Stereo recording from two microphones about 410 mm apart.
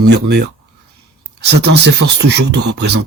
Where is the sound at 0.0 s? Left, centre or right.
Right.